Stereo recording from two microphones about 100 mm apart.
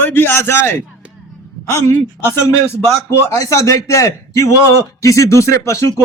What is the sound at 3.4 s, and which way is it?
A man's voice, 30° left (ahead or behind).